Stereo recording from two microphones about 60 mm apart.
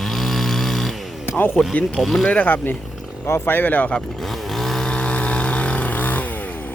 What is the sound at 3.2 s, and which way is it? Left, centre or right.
Speech, left.